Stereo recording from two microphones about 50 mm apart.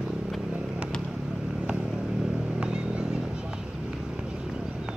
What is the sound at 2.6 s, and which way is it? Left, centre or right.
Vehicle, centre.